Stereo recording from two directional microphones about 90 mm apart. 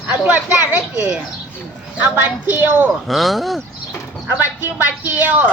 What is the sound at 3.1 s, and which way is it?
Speech, centre (ahead or behind).